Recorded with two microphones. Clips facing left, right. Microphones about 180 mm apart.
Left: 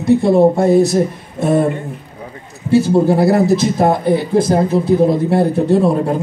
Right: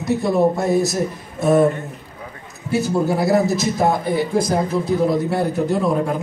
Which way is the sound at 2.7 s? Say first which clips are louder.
Left 7 dB; 30° left (ahead or behind).